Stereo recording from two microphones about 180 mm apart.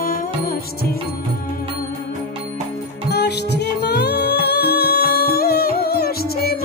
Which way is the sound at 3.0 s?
65° left (ahead or behind).